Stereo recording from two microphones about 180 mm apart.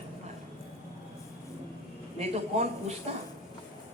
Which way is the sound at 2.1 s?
40° right (ahead or behind).